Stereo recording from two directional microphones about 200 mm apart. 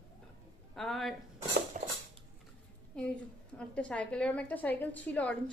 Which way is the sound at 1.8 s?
40° right (ahead or behind).